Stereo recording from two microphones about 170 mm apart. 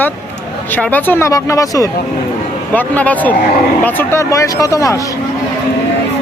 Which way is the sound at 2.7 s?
10° left (ahead or behind).